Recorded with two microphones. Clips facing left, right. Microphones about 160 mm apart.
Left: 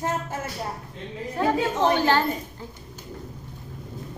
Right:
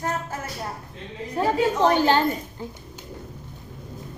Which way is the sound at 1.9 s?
15° right (ahead or behind).